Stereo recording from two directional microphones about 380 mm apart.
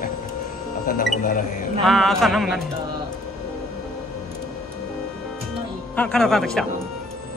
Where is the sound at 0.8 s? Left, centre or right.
Left.